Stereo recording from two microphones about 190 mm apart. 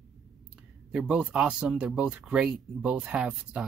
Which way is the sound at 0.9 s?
5° right (ahead or behind).